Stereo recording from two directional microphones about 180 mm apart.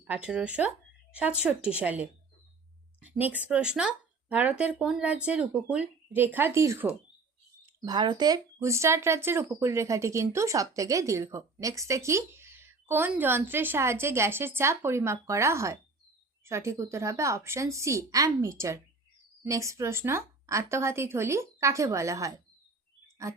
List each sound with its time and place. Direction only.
0.1 s speech: 5° right (ahead or behind)
7.6 s a sound: 10° right (ahead or behind)
7.9 s speech: 25° right (ahead or behind)